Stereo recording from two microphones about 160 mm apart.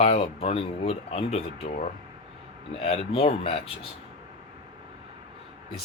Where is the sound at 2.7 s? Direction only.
40° left (ahead or behind).